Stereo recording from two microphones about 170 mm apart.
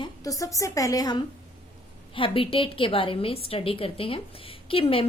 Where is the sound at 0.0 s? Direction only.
20° left (ahead or behind).